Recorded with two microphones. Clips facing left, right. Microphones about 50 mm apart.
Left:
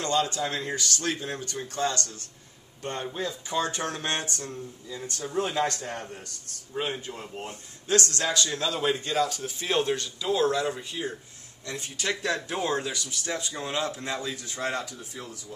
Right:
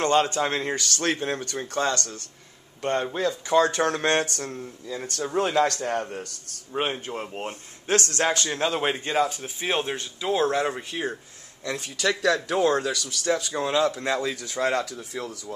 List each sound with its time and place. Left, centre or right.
0.0 s a man's voice: right
11.6 s speech: right
13.2 s speech: right